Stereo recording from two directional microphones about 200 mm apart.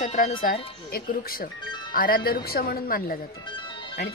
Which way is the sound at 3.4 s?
25° left (ahead or behind).